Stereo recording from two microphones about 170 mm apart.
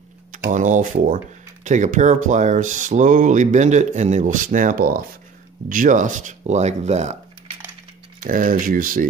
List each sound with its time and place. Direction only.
0.3 s speech: 50° right (ahead or behind)
8.2 s speech: 55° right (ahead or behind)